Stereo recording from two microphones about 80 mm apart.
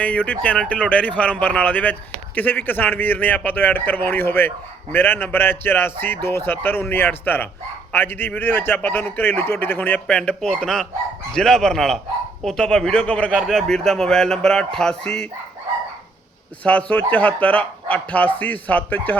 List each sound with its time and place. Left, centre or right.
0.0 s speech: centre
16.6 s speech: centre